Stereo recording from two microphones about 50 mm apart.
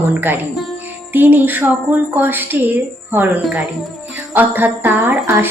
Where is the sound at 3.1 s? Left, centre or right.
Right.